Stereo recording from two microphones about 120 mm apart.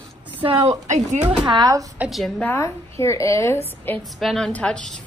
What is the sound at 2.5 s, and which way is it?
A woman's voice, 25° left (ahead or behind).